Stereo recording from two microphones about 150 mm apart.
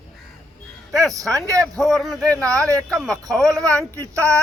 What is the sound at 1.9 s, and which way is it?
Speech, centre (ahead or behind).